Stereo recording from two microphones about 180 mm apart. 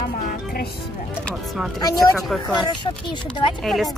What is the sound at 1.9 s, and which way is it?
Speech, centre (ahead or behind).